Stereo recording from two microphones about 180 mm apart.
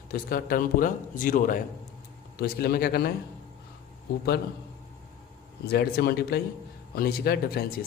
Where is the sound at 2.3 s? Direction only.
60° left (ahead or behind).